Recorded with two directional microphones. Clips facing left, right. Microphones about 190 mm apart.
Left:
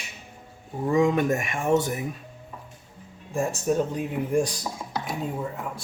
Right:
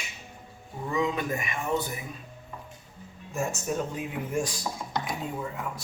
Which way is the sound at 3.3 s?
30° left (ahead or behind).